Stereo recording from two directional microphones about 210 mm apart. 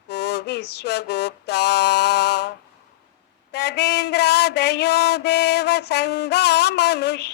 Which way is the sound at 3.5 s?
50° left (ahead or behind).